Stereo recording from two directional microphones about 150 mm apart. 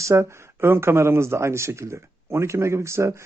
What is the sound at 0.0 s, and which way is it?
Speech, 20° right (ahead or behind).